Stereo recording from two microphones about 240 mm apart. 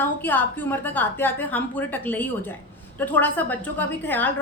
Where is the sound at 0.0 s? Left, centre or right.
Centre.